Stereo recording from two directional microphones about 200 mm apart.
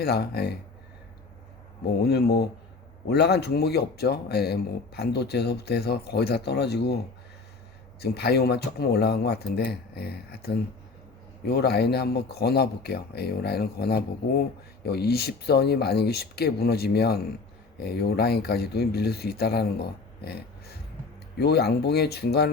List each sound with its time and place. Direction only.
0.0 s speech: 50° left (ahead or behind)
2.0 s speech: 55° left (ahead or behind)
8.0 s speech: 55° left (ahead or behind)